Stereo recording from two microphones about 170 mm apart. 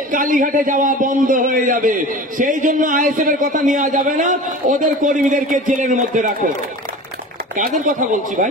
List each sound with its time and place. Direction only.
0.1 s a man's voice: 50° right (ahead or behind)
7.5 s a man's voice: 50° right (ahead or behind)